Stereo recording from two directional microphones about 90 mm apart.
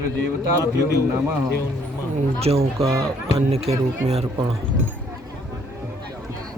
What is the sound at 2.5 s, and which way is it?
Speech, 90° right.